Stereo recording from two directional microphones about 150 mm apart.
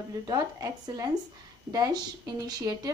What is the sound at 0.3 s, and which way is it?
A woman's voice, 25° right (ahead or behind).